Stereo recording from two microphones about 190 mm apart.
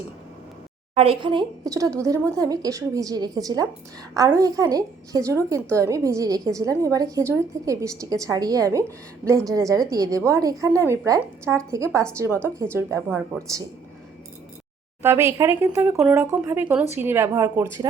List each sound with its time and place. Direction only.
0.9 s a woman's voice: 30° right (ahead or behind)
13.1 s speech: 5° right (ahead or behind)
15.0 s a woman's voice: 15° right (ahead or behind)